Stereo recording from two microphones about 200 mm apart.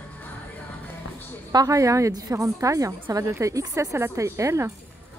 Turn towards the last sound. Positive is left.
turn(degrees=-15)  # may be behind; listen again after turning